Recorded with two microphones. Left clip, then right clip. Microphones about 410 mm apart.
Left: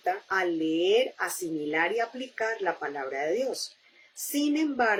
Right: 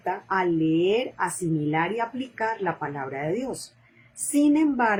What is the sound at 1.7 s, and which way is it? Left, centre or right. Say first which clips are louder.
Speech: even; centre.